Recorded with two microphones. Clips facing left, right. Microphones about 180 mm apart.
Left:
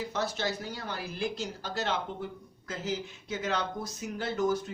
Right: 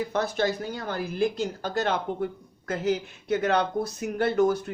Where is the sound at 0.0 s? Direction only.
55° right (ahead or behind).